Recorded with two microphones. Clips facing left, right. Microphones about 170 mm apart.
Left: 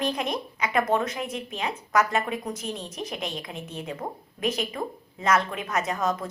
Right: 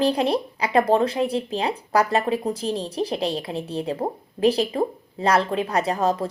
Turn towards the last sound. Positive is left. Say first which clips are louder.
# right 5 dB
turn(degrees=-30)  # may be behind; listen again after turning